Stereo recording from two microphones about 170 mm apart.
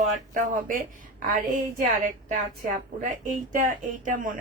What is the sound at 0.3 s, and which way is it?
A woman's voice, 50° right (ahead or behind).